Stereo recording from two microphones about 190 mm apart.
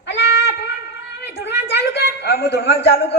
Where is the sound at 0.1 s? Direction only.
65° left (ahead or behind).